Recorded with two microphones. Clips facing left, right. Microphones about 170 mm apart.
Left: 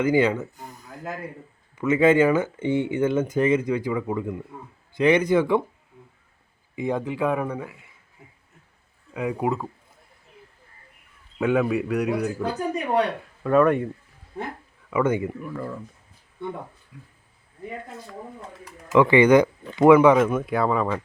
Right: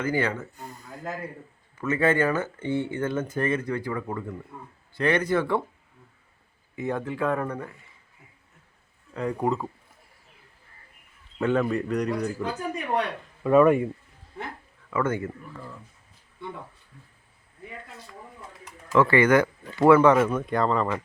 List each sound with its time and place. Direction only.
0.0 s speech: 15° left (ahead or behind)
0.5 s gasp: 65° right (ahead or behind)
1.8 s speech: 15° left (ahead or behind)
6.7 s speech: 15° left (ahead or behind)
9.1 s speech: 10° left (ahead or behind)
11.3 s speech: 10° left (ahead or behind)
13.4 s speech: 5° right (ahead or behind)
14.8 s speech: 15° left (ahead or behind)
16.9 s speech: 90° left
18.9 s speech: 15° left (ahead or behind)